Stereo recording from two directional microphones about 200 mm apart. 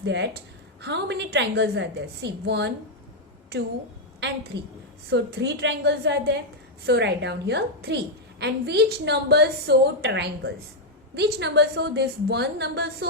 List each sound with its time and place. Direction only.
0.0 s a woman's voice: 60° right (ahead or behind)
4.5 s a woman's voice: 60° right (ahead or behind)